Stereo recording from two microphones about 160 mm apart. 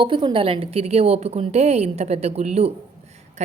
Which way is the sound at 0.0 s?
30° right (ahead or behind).